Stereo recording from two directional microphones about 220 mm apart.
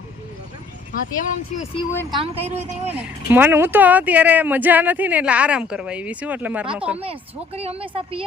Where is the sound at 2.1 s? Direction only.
25° right (ahead or behind).